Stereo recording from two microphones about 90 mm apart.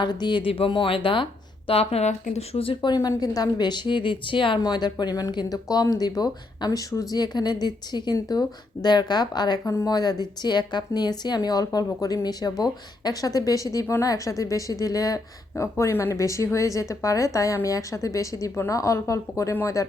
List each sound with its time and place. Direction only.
0.0 s speech: 55° left (ahead or behind); by 1.8 s 80° left
2.8 s a woman's voice: 50° left (ahead or behind); by 4.6 s 70° left (ahead or behind)
4.6 s a woman's voice: 50° left (ahead or behind)